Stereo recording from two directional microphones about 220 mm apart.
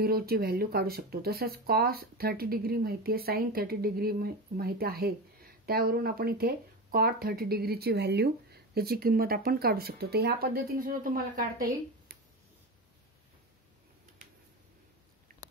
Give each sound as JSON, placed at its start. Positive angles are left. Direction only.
{"t": 0.0, "sound": "speech", "side_deg": -45}